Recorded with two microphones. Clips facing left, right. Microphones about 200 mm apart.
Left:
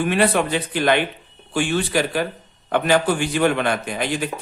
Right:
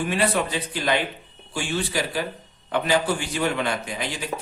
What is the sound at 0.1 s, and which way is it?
Speech, 65° left (ahead or behind).